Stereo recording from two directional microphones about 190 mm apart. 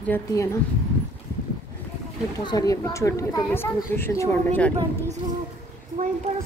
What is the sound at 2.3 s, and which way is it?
A woman's voice, 20° left (ahead or behind).